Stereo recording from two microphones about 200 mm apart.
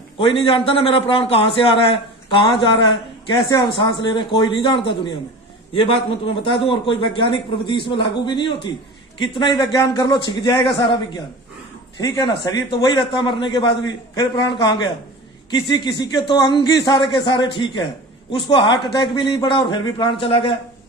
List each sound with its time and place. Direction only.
0.2 s a man's voice: 25° left (ahead or behind)